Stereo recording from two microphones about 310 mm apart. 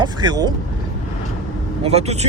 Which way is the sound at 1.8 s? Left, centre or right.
Centre.